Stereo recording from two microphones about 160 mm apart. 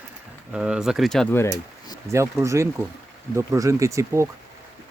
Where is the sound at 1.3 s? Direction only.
20° left (ahead or behind).